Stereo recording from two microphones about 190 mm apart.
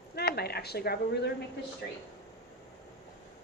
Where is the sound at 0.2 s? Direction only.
55° left (ahead or behind).